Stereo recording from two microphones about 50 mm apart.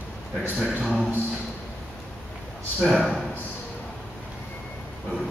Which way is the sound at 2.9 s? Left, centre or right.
Centre.